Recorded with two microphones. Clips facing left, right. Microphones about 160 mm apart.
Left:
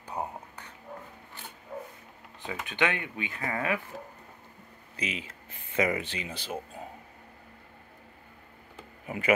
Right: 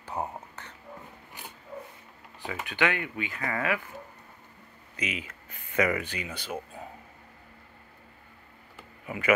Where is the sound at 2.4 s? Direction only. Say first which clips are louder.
Right 1 dB; 20° left (ahead or behind).